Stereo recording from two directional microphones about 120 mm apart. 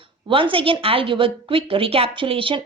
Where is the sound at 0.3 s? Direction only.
45° right (ahead or behind).